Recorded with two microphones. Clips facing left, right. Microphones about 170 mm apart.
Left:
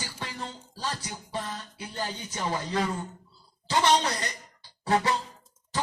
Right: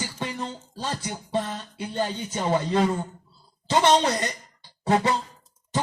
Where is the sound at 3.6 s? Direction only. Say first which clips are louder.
Right 4 dB; 25° right (ahead or behind).